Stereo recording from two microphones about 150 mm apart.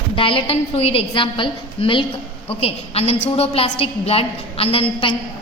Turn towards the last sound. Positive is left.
turn(degrees=40)  # may be behind; listen again after turning